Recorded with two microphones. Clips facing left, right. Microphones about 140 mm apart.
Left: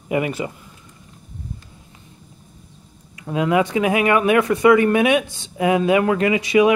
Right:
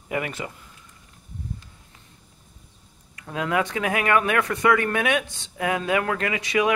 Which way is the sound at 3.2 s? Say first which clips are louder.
Left 6 dB; 10° left (ahead or behind).